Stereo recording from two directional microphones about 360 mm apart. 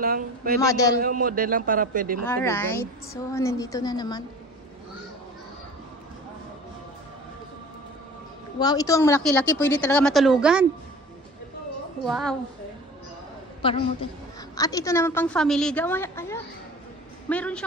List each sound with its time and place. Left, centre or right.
0.0 s a man's voice: right
0.6 s a woman's voice: centre
0.9 s a man's voice: right
2.2 s a woman's voice: centre
8.5 s a woman's voice: centre
12.1 s a woman's voice: centre
13.6 s a woman's voice: centre